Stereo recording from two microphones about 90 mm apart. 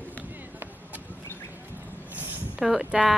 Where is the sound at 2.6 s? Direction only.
5° right (ahead or behind).